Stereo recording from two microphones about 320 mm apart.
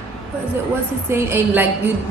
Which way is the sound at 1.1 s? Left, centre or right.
Centre.